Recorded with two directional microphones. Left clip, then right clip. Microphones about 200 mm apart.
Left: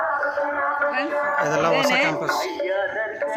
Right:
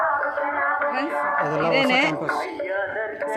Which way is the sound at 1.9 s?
60° right (ahead or behind).